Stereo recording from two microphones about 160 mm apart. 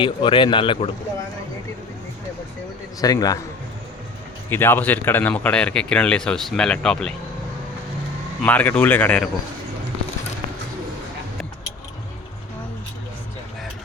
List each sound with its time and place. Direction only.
0.0 s speech: 30° left (ahead or behind)
3.0 s speech: 25° left (ahead or behind)
4.4 s speech: 15° left (ahead or behind)
8.4 s speech: 10° left (ahead or behind)